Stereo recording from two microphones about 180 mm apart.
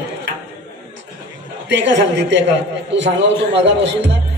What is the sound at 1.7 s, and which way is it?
A man's voice, 80° right.